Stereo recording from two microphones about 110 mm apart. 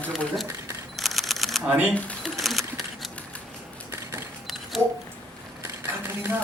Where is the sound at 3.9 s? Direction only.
20° right (ahead or behind).